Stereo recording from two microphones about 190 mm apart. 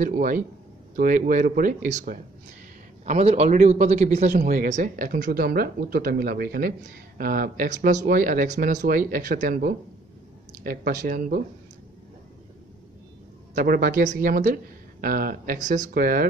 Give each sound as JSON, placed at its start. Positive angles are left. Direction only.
{"t": 0.0, "sound": "a man's voice", "side_deg": -45}
{"t": 13.6, "sound": "a man's voice", "side_deg": -50}